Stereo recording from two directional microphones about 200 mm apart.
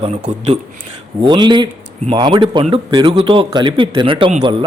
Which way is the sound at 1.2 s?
20° right (ahead or behind).